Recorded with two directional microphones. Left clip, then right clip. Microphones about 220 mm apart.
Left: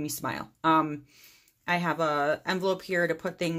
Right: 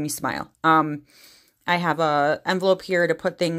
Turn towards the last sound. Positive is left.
turn(degrees=-35)  # may be behind; listen again after turning